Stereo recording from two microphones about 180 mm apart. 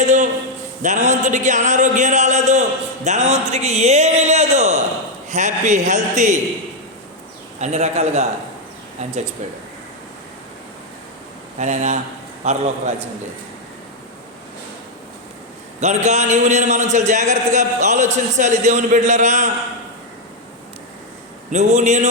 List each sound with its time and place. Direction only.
0.0 s a sound: 40° right (ahead or behind)
0.8 s a man's voice: 40° right (ahead or behind)
7.6 s a man's voice: 40° right (ahead or behind)
11.6 s a man's voice: 40° right (ahead or behind)
15.8 s a man's voice: 40° right (ahead or behind)
21.5 s a man's voice: 40° right (ahead or behind)